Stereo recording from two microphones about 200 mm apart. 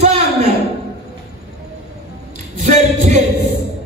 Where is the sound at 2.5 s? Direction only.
35° right (ahead or behind).